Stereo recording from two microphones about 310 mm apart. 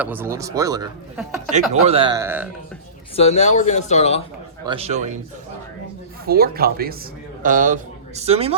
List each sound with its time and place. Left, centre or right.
0.0 s speech: centre
3.2 s speech: left
4.6 s a man's voice: centre
6.2 s a man's voice: right